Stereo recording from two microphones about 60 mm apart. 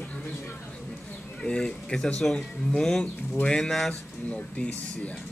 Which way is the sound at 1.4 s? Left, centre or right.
Centre.